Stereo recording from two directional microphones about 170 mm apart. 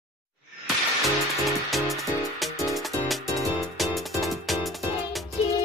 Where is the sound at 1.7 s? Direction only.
Centre (ahead or behind).